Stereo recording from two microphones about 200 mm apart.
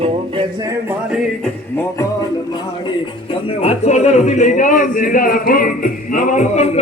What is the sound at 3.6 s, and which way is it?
Speech, 35° left (ahead or behind).